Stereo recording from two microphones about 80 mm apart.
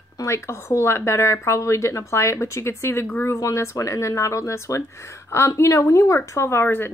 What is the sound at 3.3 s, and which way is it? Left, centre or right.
A woman's voice, left.